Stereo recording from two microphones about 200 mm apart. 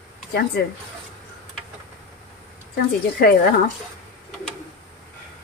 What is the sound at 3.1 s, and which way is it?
Speech, 50° left (ahead or behind).